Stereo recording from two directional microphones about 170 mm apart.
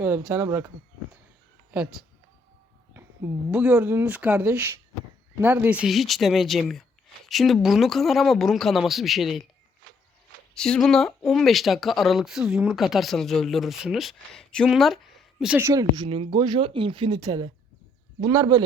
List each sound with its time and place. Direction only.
0.0 s speech: 10° right (ahead or behind)
1.7 s speech: 5° right (ahead or behind)
10.5 s speech: 5° left (ahead or behind)
15.6 s speech: 20° right (ahead or behind)